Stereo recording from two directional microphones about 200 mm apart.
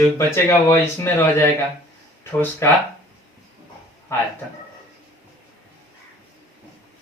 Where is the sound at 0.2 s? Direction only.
10° left (ahead or behind).